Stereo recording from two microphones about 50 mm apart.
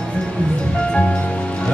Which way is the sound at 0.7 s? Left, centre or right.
Left.